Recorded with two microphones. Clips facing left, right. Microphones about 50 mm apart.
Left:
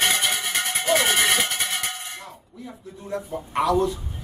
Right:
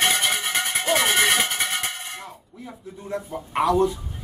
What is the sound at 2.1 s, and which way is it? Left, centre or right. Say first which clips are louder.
Speech: right 1 dB; centre.